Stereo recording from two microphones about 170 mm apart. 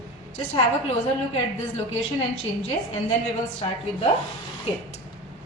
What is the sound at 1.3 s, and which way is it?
Speech, 35° left (ahead or behind).